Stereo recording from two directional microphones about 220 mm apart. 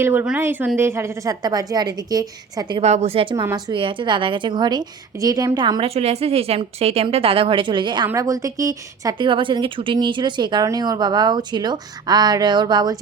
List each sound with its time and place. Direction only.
0.0 s a woman's voice: 10° right (ahead or behind)